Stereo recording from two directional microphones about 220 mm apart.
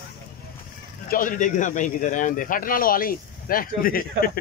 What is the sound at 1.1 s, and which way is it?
A man's voice, 35° left (ahead or behind).